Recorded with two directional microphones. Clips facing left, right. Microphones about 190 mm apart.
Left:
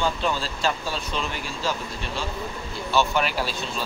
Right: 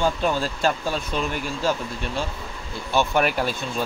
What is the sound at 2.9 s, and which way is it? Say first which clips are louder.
Speech: right 2 dB; 55° right (ahead or behind).